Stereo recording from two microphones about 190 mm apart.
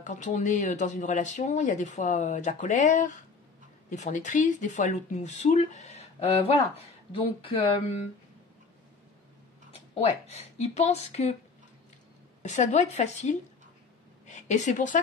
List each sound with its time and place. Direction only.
0.0 s speech: 40° left (ahead or behind)
9.7 s speech: 35° left (ahead or behind)
12.4 s a woman's voice: 40° left (ahead or behind)